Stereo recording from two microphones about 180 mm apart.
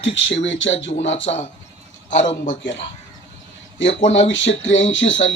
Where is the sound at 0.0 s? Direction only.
90° left.